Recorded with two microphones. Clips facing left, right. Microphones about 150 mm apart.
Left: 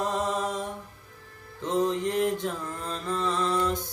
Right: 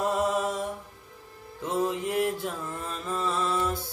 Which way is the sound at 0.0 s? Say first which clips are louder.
Right 2 dB; 10° right (ahead or behind).